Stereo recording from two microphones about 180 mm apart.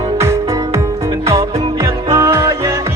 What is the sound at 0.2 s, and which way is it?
Music, 15° right (ahead or behind).